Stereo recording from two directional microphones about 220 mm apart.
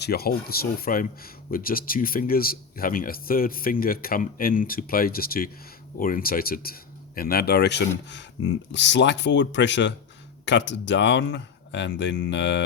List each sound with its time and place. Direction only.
0.0 s speech: 45° left (ahead or behind)